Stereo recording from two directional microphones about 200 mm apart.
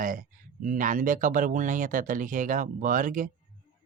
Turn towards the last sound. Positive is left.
turn(degrees=-40)  # may be behind; listen again after turning